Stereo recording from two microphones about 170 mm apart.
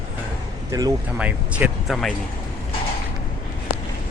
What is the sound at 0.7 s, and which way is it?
Speech, 20° right (ahead or behind).